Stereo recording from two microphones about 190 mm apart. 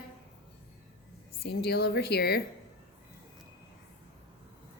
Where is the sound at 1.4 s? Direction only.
55° left (ahead or behind).